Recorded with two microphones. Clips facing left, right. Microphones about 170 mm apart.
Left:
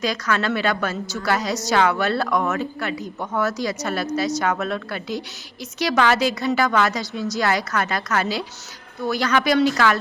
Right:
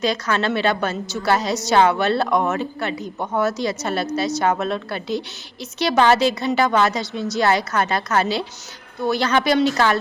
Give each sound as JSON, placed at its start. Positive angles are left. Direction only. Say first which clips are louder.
{"t": 0.0, "sound": "a woman's voice", "louder": "right 2 dB", "side_deg": -25}